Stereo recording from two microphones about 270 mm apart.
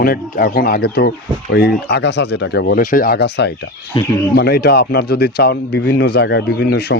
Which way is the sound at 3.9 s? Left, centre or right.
Centre.